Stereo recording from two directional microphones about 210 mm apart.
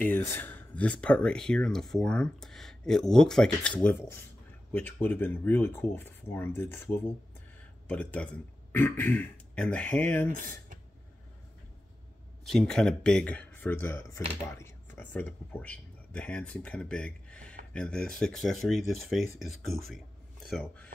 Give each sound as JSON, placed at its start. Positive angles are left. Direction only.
{"t": 0.3, "sound": "speech", "side_deg": 10}
{"t": 10.3, "sound": "speech", "side_deg": -40}
{"t": 12.4, "sound": "speech", "side_deg": 0}